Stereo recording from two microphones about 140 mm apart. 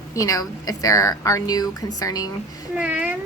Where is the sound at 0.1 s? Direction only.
25° left (ahead or behind).